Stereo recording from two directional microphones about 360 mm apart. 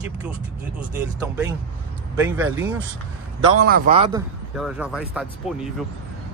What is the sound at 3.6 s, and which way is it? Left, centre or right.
Speech, right.